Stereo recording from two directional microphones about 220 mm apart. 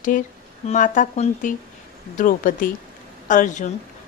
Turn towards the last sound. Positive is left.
turn(degrees=35)  # may be behind; listen again after turning